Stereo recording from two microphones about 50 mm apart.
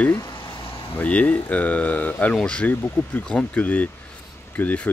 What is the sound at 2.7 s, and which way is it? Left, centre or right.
Speech, left.